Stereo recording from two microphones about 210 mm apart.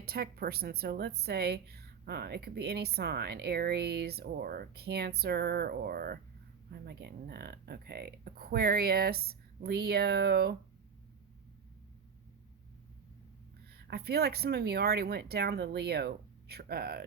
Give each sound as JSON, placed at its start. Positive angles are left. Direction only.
{"t": 0.0, "sound": "speech", "side_deg": -50}
{"t": 13.8, "sound": "speech", "side_deg": -50}